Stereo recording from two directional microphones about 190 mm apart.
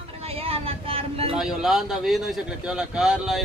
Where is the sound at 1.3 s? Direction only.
Centre (ahead or behind).